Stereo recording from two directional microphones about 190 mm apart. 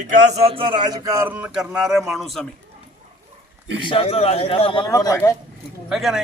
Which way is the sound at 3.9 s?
30° left (ahead or behind).